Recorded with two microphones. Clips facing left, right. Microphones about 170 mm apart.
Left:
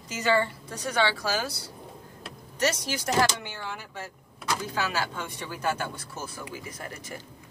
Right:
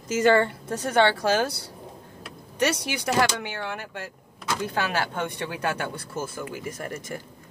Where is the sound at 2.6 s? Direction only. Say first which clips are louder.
Right 3 dB; 60° right (ahead or behind).